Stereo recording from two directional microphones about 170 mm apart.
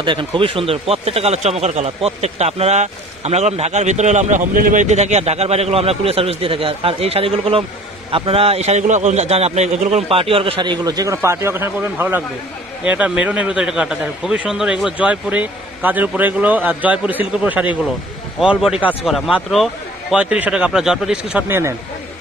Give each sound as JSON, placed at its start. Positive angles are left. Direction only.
{"t": 0.0, "sound": "a man's voice", "side_deg": -30}